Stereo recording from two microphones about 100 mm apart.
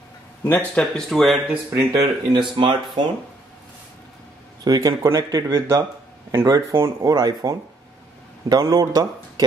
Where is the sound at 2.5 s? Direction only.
55° right (ahead or behind).